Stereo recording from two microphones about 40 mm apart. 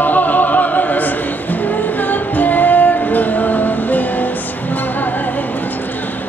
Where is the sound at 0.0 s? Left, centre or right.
Left.